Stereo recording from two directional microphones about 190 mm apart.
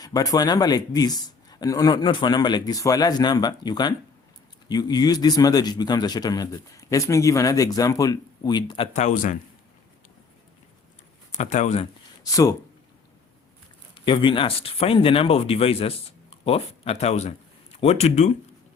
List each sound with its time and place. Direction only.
0.0 s a man's voice: 20° left (ahead or behind); by 9.4 s 40° left (ahead or behind)
11.3 s speech: 40° left (ahead or behind)
12.2 s speech: 15° left (ahead or behind)
13.9 s a man's voice: 25° left (ahead or behind)